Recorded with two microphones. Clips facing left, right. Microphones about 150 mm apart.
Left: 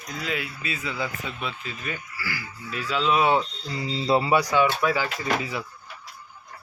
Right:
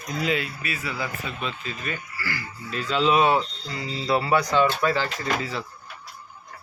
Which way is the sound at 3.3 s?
20° left (ahead or behind).